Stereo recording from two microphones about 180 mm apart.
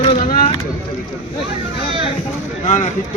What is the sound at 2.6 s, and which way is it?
Speech, 40° left (ahead or behind).